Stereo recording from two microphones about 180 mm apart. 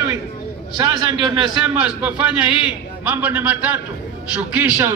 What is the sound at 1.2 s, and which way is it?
Speech, 25° right (ahead or behind).